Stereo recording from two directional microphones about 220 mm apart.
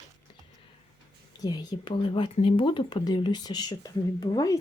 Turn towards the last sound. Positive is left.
turn(degrees=15)  # may be behind; listen again after turning